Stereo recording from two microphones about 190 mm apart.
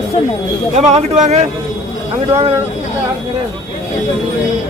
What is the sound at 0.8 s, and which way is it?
Speech, 35° right (ahead or behind).